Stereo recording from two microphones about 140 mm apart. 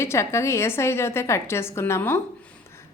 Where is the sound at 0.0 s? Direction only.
20° left (ahead or behind).